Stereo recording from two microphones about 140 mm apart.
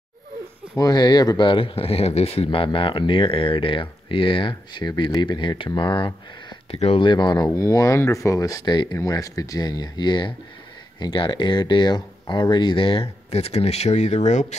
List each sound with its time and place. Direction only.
0.7 s speech: 30° left (ahead or behind); by 14.4 s 55° left (ahead or behind)